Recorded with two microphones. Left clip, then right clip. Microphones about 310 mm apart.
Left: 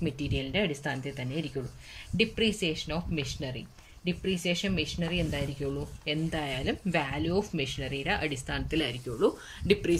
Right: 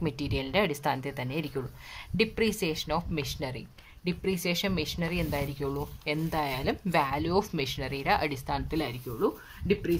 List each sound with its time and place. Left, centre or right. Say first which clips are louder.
0.0 s speech: right 1 dB; centre